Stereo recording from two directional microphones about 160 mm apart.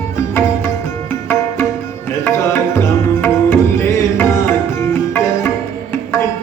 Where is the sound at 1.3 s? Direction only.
15° left (ahead or behind).